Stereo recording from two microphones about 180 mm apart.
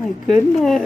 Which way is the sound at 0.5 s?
Centre (ahead or behind).